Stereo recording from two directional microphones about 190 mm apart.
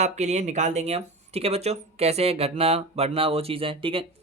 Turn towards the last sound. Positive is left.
turn(degrees=-30)  # may be behind; listen again after turning